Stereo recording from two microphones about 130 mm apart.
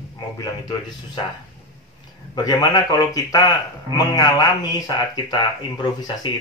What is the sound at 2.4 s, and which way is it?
Speech, 35° left (ahead or behind).